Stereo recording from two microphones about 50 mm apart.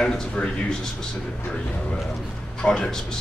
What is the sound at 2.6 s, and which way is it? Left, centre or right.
Speech, centre.